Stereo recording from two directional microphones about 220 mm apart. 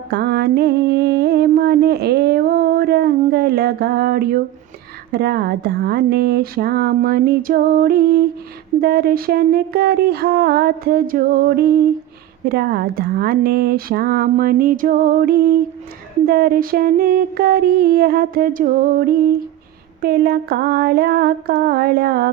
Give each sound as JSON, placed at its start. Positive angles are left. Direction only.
{"t": 0.1, "sound": "music", "side_deg": -45}
{"t": 5.1, "sound": "speech", "side_deg": -45}